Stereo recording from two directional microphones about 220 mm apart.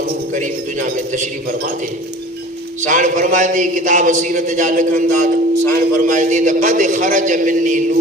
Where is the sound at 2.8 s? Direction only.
35° right (ahead or behind).